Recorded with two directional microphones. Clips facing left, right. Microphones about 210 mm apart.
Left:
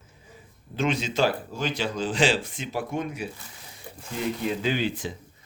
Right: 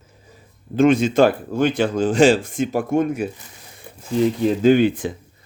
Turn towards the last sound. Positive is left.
turn(degrees=-55)  # may be behind; listen again after turning